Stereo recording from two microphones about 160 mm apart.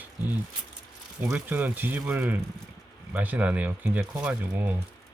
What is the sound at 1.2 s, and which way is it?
Speech, 15° right (ahead or behind).